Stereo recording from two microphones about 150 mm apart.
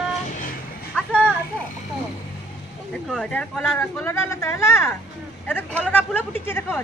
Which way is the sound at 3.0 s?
5° left (ahead or behind).